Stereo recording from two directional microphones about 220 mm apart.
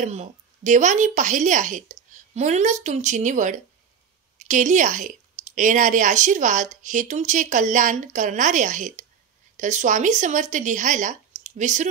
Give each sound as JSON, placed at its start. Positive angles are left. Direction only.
{"t": 0.0, "sound": "a woman's voice", "side_deg": -35}